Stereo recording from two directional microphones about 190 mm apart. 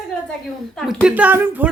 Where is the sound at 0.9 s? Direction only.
5° right (ahead or behind).